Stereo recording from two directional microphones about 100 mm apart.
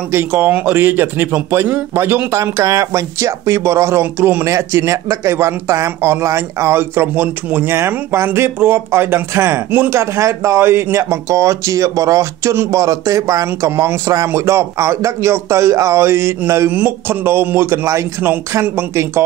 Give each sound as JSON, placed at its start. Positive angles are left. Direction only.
{"t": 0.1, "sound": "speech", "side_deg": -20}
{"t": 4.5, "sound": "speech", "side_deg": -30}